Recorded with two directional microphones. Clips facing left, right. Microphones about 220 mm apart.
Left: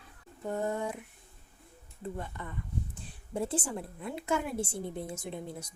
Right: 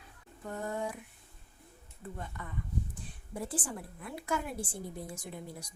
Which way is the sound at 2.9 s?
25° left (ahead or behind).